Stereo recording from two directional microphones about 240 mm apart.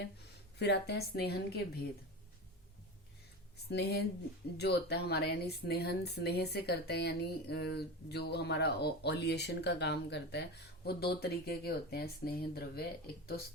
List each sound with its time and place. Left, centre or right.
0.6 s a woman's voice: left
3.7 s a woman's voice: left